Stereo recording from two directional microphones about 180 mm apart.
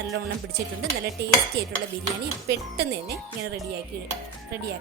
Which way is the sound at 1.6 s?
65° right (ahead or behind).